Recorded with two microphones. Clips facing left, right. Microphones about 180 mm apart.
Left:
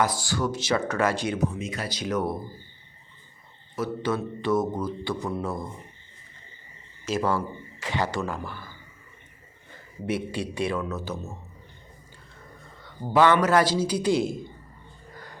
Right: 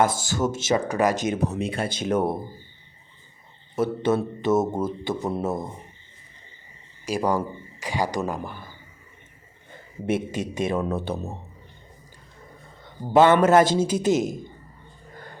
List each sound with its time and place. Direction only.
0.0 s speech: 20° right (ahead or behind)
1.6 s speech: 25° right (ahead or behind)
3.8 s speech: 25° right (ahead or behind)
7.0 s speech: 15° right (ahead or behind)
10.1 s speech: 20° right (ahead or behind)
12.8 s speech: 25° right (ahead or behind)
13.9 s a woman's voice: 45° right (ahead or behind)